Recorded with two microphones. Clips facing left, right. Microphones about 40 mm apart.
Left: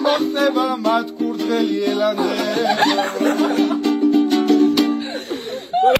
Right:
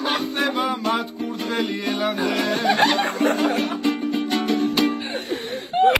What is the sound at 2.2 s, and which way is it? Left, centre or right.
Music, centre.